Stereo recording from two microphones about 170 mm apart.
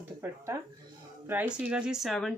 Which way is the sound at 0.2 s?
15° right (ahead or behind).